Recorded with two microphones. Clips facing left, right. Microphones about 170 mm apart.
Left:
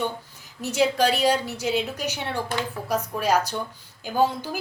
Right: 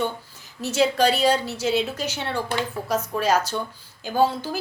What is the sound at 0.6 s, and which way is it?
A woman's voice, 15° left (ahead or behind).